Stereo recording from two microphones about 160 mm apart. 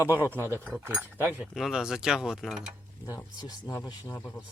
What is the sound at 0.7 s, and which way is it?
Speech, 5° right (ahead or behind).